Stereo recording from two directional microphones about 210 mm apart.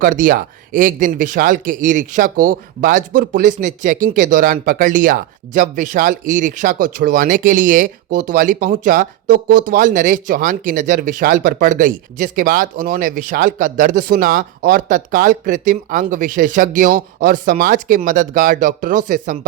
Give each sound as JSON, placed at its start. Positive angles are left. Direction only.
{"t": 0.0, "sound": "speech", "side_deg": -40}